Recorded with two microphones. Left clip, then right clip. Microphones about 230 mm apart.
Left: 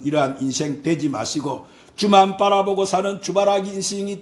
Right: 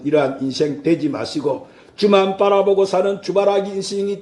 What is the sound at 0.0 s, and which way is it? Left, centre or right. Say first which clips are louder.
Speech: right 3 dB; left.